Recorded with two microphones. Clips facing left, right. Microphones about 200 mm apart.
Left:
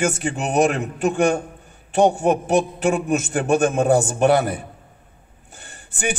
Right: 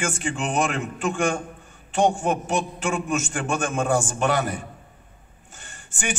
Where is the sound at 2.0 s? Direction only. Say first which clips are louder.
Left 4 dB; 60° left (ahead or behind).